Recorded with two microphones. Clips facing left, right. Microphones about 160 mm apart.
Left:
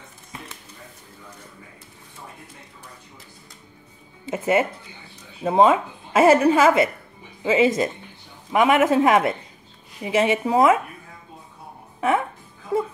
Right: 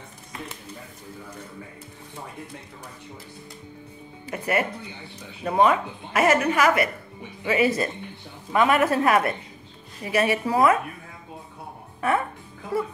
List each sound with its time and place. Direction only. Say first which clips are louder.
4.3 s a woman's voice: left 5 dB; 25° left (ahead or behind)
12.0 s speech: left 2 dB; 15° left (ahead or behind)